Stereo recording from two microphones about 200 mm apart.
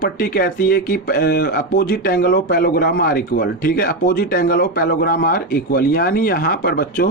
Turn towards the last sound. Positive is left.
turn(degrees=50)  # may be behind; listen again after turning